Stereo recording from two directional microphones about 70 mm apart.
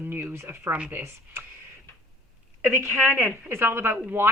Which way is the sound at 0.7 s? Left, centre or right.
Right.